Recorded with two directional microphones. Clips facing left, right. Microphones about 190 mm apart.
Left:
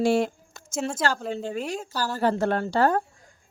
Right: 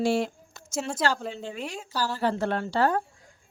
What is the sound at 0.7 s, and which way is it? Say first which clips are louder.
Speech: left 2 dB; centre (ahead or behind).